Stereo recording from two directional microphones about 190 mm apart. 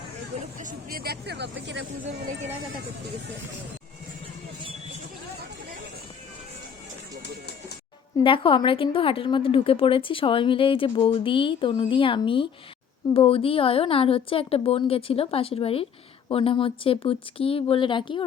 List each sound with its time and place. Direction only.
0.6 s speech: 45° right (ahead or behind); by 1.8 s 65° right (ahead or behind)
8.2 s a woman's voice: 25° left (ahead or behind)